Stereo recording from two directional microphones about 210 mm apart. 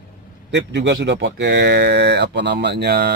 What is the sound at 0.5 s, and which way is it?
Speech, 55° right (ahead or behind).